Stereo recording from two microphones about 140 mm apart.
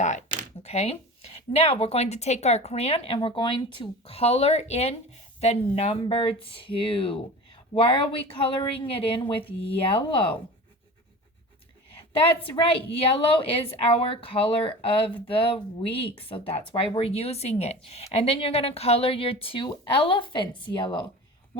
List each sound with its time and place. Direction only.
0.0 s a sound: 60° left (ahead or behind)
1.5 s speech: 45° left (ahead or behind)
3.2 s speech: 35° left (ahead or behind)
12.9 s speech: 40° left (ahead or behind)